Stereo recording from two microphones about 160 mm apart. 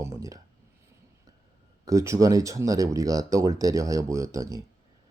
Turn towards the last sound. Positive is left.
turn(degrees=-20)  # may be behind; listen again after turning